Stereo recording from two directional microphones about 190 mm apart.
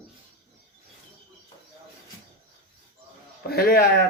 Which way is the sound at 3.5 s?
55° left (ahead or behind).